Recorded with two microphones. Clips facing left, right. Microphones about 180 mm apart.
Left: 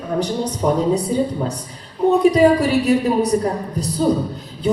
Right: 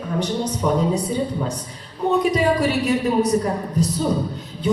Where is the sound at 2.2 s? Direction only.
35° left (ahead or behind).